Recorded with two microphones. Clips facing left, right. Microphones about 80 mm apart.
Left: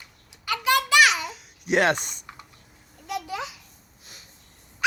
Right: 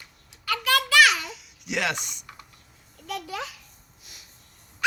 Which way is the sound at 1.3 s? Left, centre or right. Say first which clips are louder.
Left 8 dB; left.